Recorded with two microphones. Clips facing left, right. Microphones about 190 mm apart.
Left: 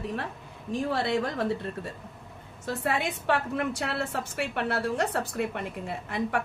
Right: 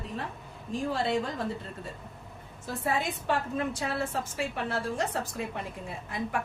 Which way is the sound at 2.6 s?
75° left (ahead or behind).